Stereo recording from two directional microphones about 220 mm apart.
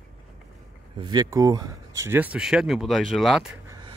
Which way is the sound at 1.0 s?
15° right (ahead or behind).